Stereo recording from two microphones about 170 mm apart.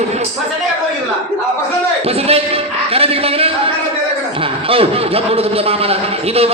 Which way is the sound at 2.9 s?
35° right (ahead or behind).